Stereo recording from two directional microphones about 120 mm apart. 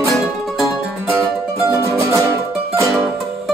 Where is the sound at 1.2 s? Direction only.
25° right (ahead or behind).